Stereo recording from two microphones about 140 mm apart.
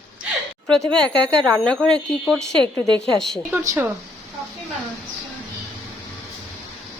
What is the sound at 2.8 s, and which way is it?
Speech, 35° right (ahead or behind).